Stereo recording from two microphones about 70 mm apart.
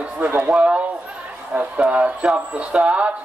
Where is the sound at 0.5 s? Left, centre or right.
Centre.